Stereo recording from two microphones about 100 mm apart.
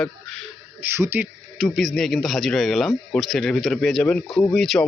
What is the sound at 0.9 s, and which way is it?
Speech, 25° right (ahead or behind).